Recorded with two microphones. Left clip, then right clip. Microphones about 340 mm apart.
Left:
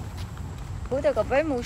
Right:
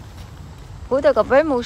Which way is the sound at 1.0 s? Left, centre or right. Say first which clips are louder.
Right 8 dB; centre.